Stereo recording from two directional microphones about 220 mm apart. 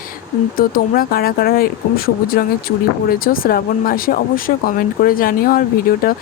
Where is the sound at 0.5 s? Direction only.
40° left (ahead or behind).